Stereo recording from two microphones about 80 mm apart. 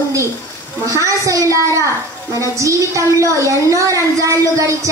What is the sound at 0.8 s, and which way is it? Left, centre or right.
A woman's voice, right.